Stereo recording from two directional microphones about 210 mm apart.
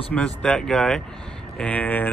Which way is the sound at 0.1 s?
5° left (ahead or behind).